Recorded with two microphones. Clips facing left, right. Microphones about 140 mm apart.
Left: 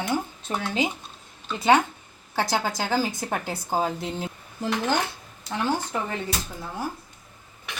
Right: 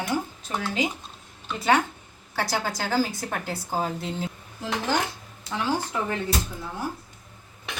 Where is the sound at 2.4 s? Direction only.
20° left (ahead or behind).